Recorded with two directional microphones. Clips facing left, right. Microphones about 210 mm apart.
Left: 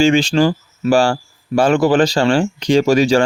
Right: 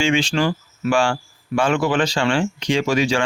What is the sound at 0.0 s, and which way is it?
Speech, 40° left (ahead or behind).